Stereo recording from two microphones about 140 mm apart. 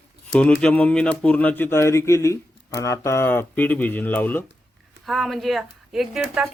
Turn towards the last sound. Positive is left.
turn(degrees=-5)  # may be behind; listen again after turning